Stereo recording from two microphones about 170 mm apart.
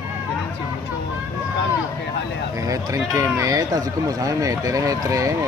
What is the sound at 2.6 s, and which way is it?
Speech, 20° right (ahead or behind).